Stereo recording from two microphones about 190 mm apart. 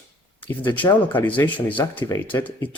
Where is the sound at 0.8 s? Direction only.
10° left (ahead or behind).